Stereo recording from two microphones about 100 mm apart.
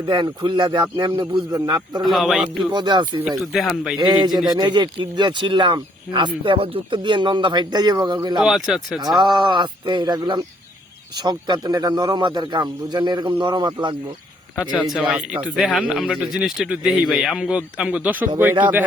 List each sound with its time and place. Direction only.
0.1 s speech: 50° right (ahead or behind)
1.5 s a man's voice: 35° right (ahead or behind)
2.0 s a man's voice: centre (ahead or behind)
2.7 s speech: 50° right (ahead or behind)
3.2 s a man's voice: centre (ahead or behind)
3.9 s speech: 50° right (ahead or behind)
4.3 s a man's voice: 5° right (ahead or behind)
4.5 s speech: 50° right (ahead or behind)
8.4 s a man's voice: centre (ahead or behind)
9.3 s speech: 45° right (ahead or behind)
14.5 s a man's voice: 15° right (ahead or behind)